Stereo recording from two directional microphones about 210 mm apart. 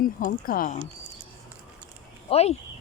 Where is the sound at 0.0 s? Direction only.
40° left (ahead or behind).